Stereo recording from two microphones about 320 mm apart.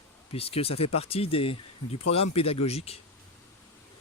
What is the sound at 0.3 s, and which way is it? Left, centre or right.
Speech, centre.